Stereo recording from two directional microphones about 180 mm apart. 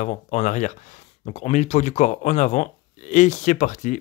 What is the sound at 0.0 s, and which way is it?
Speech, 40° left (ahead or behind).